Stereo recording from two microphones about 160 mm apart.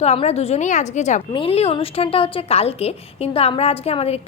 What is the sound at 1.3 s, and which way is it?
A woman's voice, 35° left (ahead or behind).